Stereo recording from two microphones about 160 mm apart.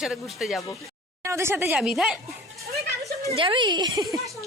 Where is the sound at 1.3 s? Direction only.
15° right (ahead or behind).